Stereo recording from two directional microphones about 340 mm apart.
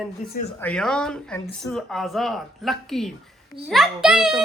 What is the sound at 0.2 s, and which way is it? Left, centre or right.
Speech, left.